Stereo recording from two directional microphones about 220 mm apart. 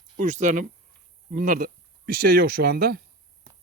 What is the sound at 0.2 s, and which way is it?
Speech, 35° right (ahead or behind).